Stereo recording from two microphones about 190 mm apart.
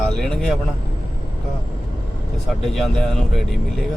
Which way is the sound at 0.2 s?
5° left (ahead or behind).